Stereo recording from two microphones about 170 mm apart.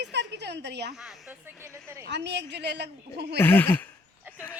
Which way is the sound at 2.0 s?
90° right.